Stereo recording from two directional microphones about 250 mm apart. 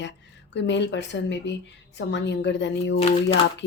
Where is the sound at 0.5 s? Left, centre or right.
Left.